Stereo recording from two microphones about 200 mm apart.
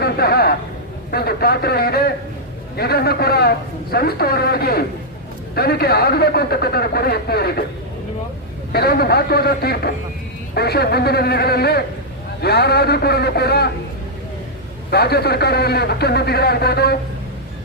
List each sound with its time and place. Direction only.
0.0 s a man's voice: 50° left (ahead or behind)
8.7 s a man's voice: 50° left (ahead or behind)
14.8 s a man's voice: 55° left (ahead or behind)